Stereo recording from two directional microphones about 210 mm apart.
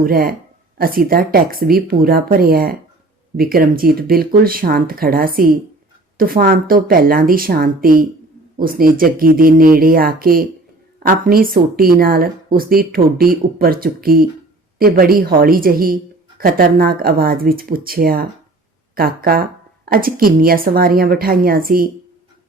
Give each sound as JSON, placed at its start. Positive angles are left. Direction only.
{"t": 0.0, "sound": "speech", "side_deg": -45}